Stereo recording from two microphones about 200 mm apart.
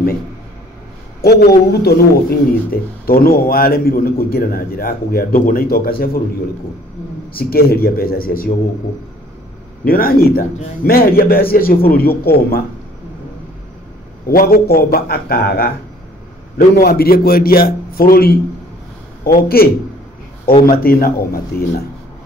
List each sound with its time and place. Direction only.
1.2 s a man's voice: 55° left (ahead or behind)
7.3 s a man's voice: 50° left (ahead or behind)
9.8 s a man's voice: 45° left (ahead or behind)
14.2 s a man's voice: 50° left (ahead or behind)